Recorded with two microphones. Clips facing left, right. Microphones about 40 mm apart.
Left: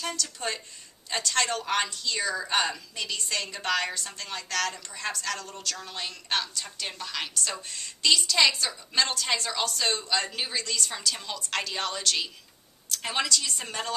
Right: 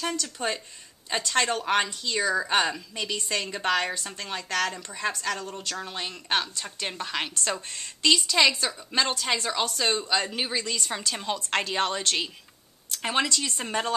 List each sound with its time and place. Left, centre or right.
0.1 s a woman's voice: centre